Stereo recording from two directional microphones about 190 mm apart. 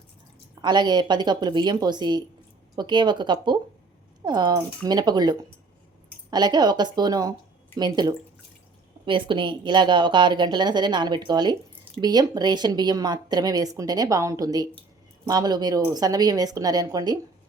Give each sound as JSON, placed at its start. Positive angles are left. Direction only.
{"t": 0.6, "sound": "a woman's voice", "side_deg": -20}